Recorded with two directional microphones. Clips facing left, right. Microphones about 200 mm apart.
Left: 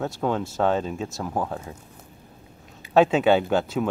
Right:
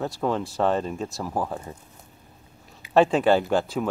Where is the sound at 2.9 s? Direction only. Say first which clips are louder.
Left 1 dB; centre (ahead or behind).